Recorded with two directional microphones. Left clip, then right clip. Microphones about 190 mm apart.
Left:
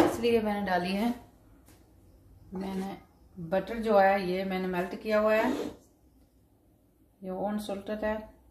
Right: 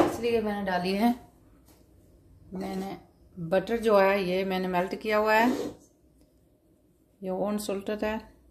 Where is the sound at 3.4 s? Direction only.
55° right (ahead or behind).